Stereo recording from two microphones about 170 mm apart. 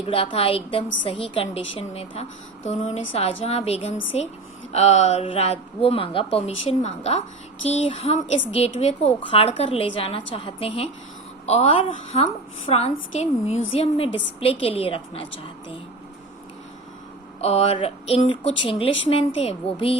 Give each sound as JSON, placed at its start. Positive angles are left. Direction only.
{"t": 0.0, "sound": "speech", "side_deg": 35}
{"t": 17.4, "sound": "speech", "side_deg": 35}